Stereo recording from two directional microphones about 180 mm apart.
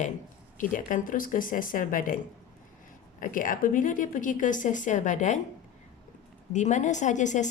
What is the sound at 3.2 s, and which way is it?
Speech, 50° left (ahead or behind).